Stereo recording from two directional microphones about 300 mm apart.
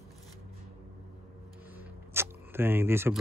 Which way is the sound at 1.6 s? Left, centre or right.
Centre.